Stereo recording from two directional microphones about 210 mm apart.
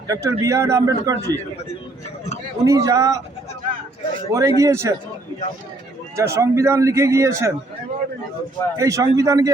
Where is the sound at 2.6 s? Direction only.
15° right (ahead or behind).